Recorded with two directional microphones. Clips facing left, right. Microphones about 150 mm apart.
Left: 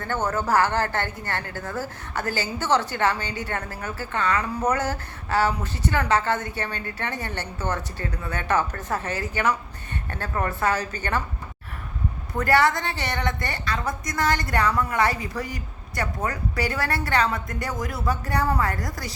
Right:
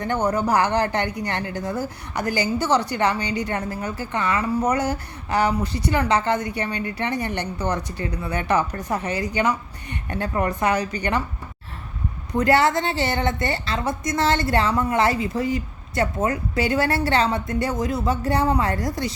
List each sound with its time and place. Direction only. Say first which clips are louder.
0.0 s a woman's voice: right 4 dB; 15° right (ahead or behind)
12.3 s a woman's voice: right 3 dB; 20° right (ahead or behind)